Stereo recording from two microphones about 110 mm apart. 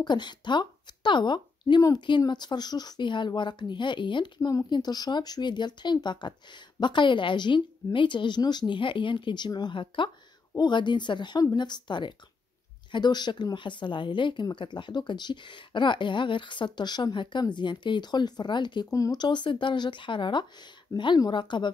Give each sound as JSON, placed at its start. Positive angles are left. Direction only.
{"t": 0.0, "sound": "speech", "side_deg": 45}
{"t": 19.2, "sound": "speech", "side_deg": 45}